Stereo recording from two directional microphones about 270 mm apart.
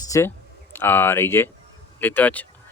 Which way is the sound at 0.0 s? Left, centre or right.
Centre.